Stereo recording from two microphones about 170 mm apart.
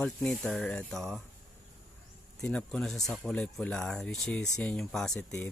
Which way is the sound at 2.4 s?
5° left (ahead or behind).